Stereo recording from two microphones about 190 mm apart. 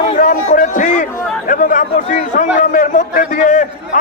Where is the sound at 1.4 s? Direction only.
45° left (ahead or behind).